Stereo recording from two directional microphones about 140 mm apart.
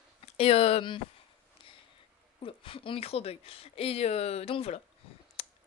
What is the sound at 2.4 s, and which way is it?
Speech, 40° left (ahead or behind).